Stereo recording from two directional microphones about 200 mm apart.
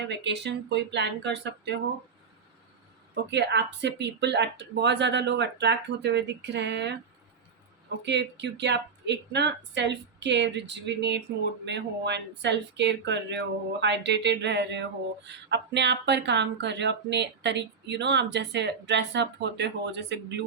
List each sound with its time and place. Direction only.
0.1 s speech: 60° right (ahead or behind)
3.2 s speech: 60° right (ahead or behind)
8.0 s speech: 60° right (ahead or behind)